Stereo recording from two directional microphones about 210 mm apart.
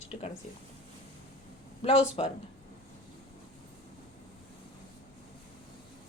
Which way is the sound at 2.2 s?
30° left (ahead or behind).